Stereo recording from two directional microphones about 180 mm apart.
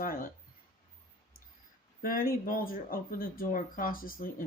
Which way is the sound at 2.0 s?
50° left (ahead or behind).